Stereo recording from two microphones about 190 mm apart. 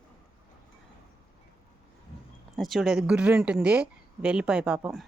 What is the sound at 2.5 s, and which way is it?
Speech, centre (ahead or behind).